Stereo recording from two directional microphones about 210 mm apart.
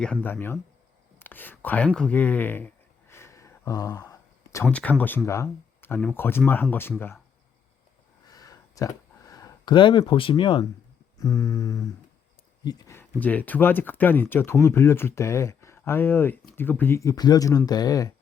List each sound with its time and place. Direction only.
0.0 s speech: 5° left (ahead or behind)
8.3 s a sound: 15° left (ahead or behind)
11.2 s speech: 15° left (ahead or behind)